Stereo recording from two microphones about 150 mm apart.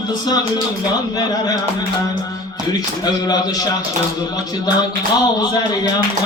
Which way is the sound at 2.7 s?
25° left (ahead or behind).